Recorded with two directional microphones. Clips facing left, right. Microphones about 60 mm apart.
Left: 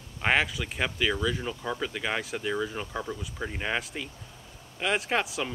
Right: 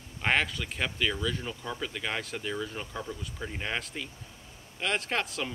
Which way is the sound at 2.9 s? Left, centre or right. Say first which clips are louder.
Left 3 dB; left.